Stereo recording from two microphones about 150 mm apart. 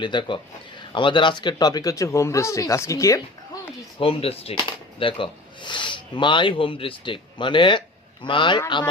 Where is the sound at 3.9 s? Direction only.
40° left (ahead or behind).